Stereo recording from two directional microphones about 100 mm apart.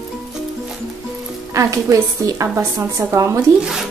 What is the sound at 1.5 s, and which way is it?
A woman's voice, 35° right (ahead or behind).